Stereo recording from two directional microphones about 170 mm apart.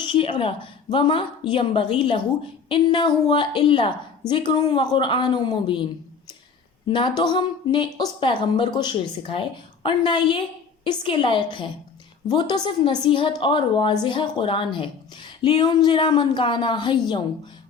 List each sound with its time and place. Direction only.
0.1 s a woman's voice: 30° left (ahead or behind)